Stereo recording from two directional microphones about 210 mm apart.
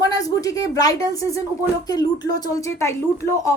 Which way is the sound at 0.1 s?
15° left (ahead or behind).